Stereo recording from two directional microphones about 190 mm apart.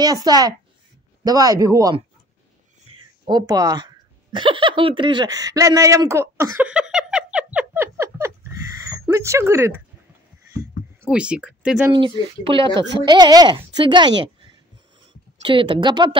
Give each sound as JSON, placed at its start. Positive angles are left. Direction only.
{"t": 0.0, "sound": "a woman's voice", "side_deg": -20}
{"t": 3.0, "sound": "a sound", "side_deg": -20}
{"t": 8.8, "sound": "speech", "side_deg": -15}
{"t": 11.0, "sound": "speech", "side_deg": -5}
{"t": 11.9, "sound": "a woman's voice", "side_deg": -25}